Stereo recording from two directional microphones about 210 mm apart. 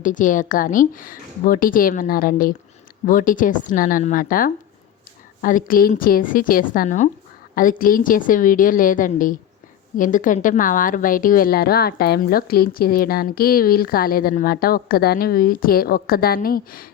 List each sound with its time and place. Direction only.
0.0 s a woman's voice: 40° left (ahead or behind)